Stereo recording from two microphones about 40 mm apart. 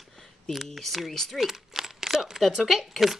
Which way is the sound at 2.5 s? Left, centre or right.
Centre.